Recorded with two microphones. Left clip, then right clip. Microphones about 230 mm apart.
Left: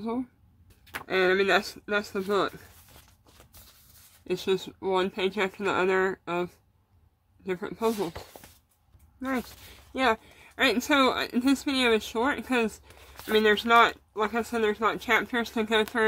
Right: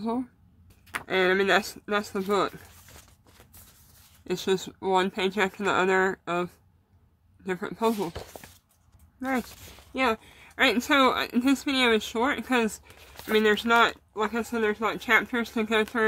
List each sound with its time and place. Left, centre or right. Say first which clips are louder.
0.0 s speech: right 2 dB; centre
4.3 s speech: right 1 dB; centre
8.3 s a sound: right 4 dB; centre
9.2 s speech: right 2 dB; centre
13.3 s speech: left 1 dB; centre